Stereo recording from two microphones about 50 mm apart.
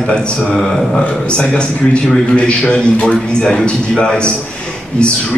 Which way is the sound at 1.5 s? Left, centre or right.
Centre.